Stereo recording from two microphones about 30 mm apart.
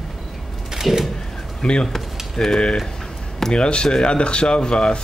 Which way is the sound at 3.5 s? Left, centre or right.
Left.